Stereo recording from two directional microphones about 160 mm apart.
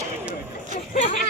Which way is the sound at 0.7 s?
50° left (ahead or behind).